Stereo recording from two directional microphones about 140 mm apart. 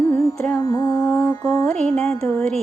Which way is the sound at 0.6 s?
25° left (ahead or behind).